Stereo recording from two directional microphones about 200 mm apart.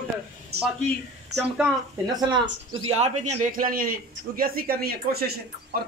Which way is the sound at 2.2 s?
20° right (ahead or behind).